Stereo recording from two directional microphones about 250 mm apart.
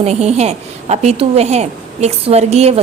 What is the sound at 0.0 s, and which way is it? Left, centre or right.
A woman's voice, right.